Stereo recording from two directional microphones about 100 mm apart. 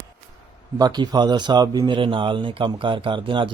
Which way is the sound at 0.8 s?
45° right (ahead or behind).